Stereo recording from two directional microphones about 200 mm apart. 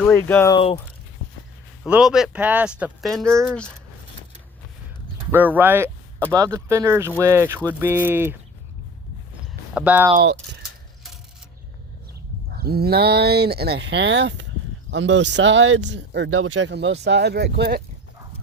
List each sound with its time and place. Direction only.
0.0 s speech: 10° left (ahead or behind)
0.5 s speech: 30° left (ahead or behind)
1.8 s speech: 5° right (ahead or behind)
5.3 s speech: 10° right (ahead or behind)
9.7 s speech: 5° right (ahead or behind)
12.5 s speech: 50° right (ahead or behind)